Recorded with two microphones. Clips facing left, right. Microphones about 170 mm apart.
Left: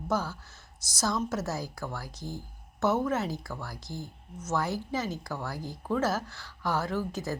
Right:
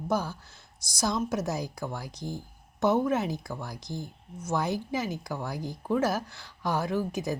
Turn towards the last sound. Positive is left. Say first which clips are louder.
# right 3 dB
turn(degrees=-15)  # may be behind; listen again after turning